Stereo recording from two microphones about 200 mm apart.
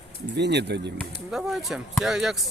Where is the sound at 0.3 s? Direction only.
60° right (ahead or behind).